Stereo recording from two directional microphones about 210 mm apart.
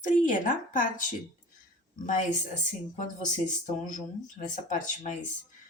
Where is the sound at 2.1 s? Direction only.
35° left (ahead or behind).